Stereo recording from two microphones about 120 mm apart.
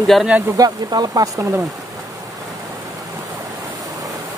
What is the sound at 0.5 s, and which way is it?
Speech, 35° right (ahead or behind).